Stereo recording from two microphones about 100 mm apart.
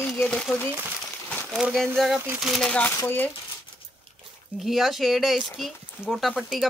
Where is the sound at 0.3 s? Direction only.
5° left (ahead or behind).